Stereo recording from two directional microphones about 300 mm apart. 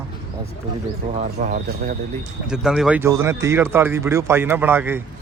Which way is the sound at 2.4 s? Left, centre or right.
Centre.